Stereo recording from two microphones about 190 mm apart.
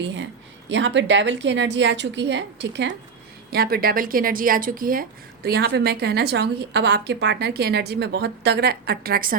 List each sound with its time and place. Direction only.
0.0 s a woman's voice: 70° right (ahead or behind)
3.5 s speech: 55° right (ahead or behind)